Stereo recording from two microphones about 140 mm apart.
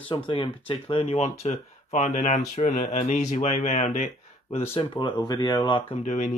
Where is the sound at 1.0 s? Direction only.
50° left (ahead or behind).